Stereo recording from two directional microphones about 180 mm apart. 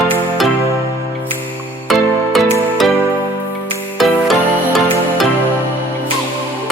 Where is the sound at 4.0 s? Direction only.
Centre (ahead or behind).